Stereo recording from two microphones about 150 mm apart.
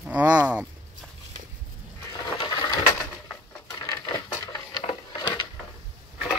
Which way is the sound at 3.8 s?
25° left (ahead or behind).